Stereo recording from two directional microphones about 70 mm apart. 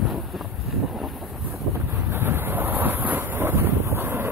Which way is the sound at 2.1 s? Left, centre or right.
Right.